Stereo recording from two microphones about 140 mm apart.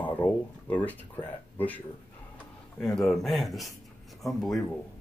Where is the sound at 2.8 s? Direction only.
5° left (ahead or behind).